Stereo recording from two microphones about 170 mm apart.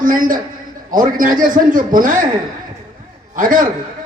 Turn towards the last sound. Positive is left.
turn(degrees=-50)  # may be behind; listen again after turning